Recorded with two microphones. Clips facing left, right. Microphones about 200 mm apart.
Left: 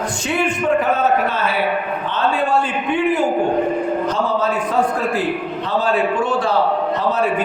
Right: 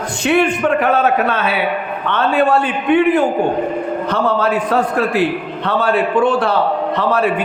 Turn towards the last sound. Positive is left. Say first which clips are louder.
# right 2 dB
turn(degrees=-60)  # may be behind; listen again after turning